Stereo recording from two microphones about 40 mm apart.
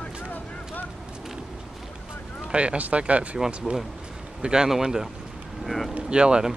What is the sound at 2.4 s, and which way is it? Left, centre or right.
Speech, right.